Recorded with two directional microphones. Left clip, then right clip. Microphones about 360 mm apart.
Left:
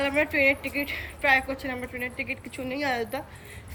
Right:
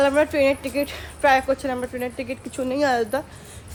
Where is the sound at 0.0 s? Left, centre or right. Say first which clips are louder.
Right 5 dB; centre.